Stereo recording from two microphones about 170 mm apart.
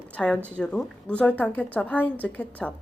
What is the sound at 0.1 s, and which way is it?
Speech, 5° left (ahead or behind).